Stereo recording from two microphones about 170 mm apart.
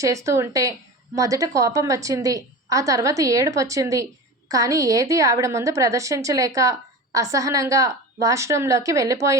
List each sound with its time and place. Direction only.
0.0 s a woman's voice: 20° right (ahead or behind)